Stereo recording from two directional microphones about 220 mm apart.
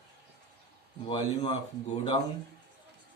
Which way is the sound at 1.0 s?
25° left (ahead or behind).